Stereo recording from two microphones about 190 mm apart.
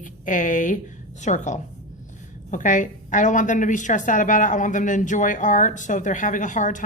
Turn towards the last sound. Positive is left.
turn(degrees=40)  # may be behind; listen again after turning